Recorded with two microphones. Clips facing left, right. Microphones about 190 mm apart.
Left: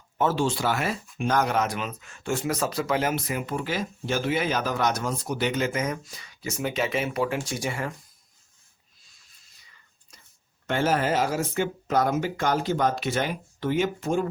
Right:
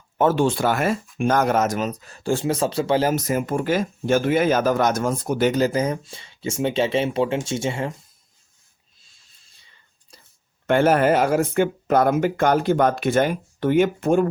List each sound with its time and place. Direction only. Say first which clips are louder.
0.2 s speech: right 6 dB; 55° right (ahead or behind); by 7.9 s 25° right (ahead or behind)
9.0 s a sound: even; 30° right (ahead or behind)
10.7 s speech: right 7 dB; 55° right (ahead or behind)